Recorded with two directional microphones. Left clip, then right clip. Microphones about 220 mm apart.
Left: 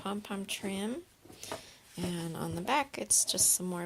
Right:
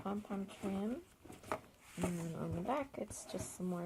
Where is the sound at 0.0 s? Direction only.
45° left (ahead or behind).